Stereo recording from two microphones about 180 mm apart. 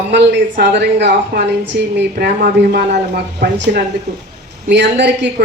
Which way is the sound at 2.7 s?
60° right (ahead or behind).